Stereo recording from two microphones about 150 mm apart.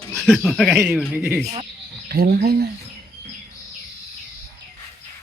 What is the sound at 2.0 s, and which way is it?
Speech, 90° right.